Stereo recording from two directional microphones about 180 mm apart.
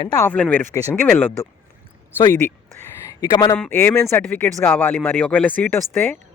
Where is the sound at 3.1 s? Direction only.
20° left (ahead or behind).